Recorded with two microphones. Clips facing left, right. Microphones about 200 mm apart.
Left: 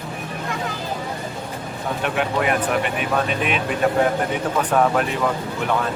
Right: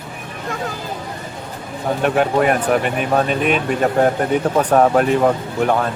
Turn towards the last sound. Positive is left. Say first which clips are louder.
# right 6 dB
turn(degrees=-40)  # may be behind; listen again after turning